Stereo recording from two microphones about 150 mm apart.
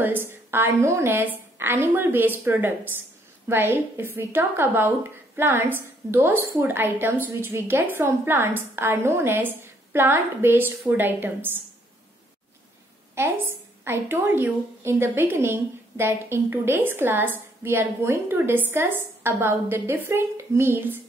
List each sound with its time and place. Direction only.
0.0 s a woman's voice: 15° right (ahead or behind)
13.1 s a woman's voice: 15° right (ahead or behind)